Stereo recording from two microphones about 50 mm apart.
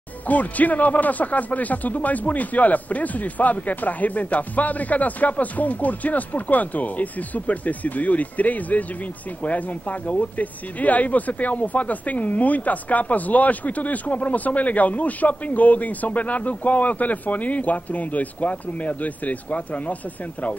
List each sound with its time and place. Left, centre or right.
0.3 s speech: left